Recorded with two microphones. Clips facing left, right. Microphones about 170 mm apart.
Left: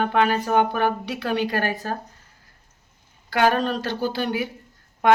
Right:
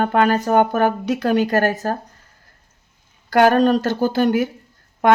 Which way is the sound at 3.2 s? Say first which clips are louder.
Right 7 dB; 45° right (ahead or behind).